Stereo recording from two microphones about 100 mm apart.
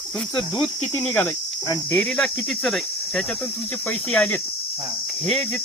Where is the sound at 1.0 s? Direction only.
15° left (ahead or behind).